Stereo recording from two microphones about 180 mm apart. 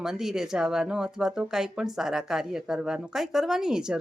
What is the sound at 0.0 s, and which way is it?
Speech, 5° right (ahead or behind).